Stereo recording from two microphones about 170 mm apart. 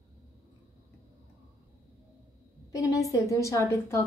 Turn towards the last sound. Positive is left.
turn(degrees=15)  # may be behind; listen again after turning